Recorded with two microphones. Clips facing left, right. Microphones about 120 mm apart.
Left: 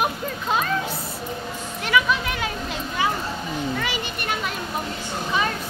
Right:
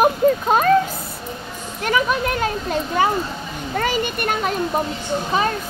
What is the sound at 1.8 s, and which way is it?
Speech, 45° right (ahead or behind).